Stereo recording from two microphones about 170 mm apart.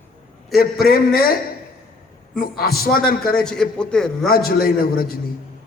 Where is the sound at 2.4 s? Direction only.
65° left (ahead or behind).